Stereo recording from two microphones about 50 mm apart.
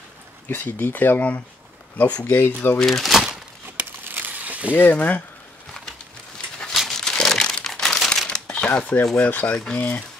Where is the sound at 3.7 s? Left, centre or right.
Right.